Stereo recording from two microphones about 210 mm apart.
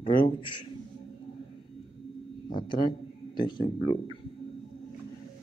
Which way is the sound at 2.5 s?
25° left (ahead or behind).